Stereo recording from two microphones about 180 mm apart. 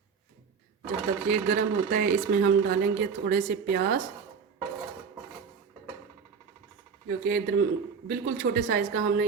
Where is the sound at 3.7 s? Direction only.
60° right (ahead or behind).